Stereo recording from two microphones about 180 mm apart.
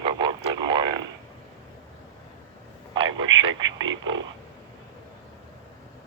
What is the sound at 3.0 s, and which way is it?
Speech, 90° right.